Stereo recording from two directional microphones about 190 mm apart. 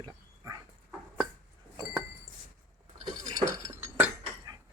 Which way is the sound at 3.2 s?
20° right (ahead or behind).